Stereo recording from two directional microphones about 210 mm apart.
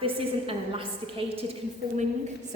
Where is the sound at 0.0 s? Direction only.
25° right (ahead or behind).